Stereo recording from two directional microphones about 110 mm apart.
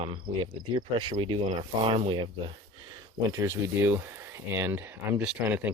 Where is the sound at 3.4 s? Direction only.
20° right (ahead or behind).